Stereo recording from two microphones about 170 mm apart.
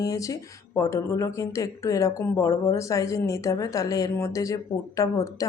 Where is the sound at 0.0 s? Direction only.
20° left (ahead or behind).